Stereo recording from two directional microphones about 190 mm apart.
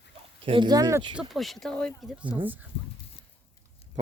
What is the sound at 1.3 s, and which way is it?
Speech, centre (ahead or behind).